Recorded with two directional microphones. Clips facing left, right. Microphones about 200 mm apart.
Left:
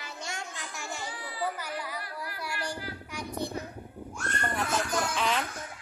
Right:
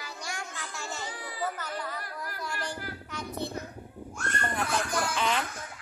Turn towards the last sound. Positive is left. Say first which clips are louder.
# even
turn(degrees=0)  # may be behind; listen again after turning